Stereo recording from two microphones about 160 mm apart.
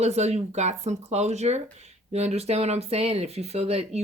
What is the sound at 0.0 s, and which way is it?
Speech, 45° right (ahead or behind).